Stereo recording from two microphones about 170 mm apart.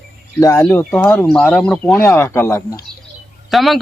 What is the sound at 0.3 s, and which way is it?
Speech, 20° left (ahead or behind).